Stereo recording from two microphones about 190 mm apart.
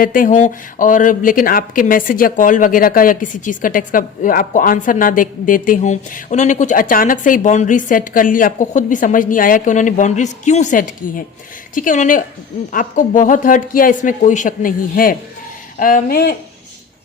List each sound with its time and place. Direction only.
0.0 s speech: 45° left (ahead or behind)